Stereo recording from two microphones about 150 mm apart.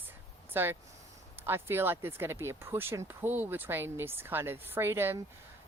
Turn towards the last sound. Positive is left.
turn(degrees=-15)  # may be behind; listen again after turning